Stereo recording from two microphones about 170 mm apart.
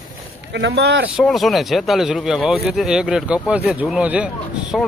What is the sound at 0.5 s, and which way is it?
Speech, 85° right.